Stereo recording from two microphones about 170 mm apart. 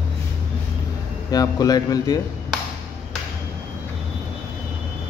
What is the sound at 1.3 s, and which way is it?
Speech, 20° left (ahead or behind).